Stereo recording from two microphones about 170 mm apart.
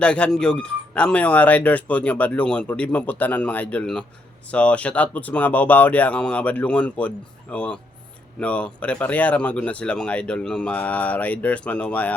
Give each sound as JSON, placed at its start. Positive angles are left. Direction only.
{"t": 0.0, "sound": "speech", "side_deg": 5}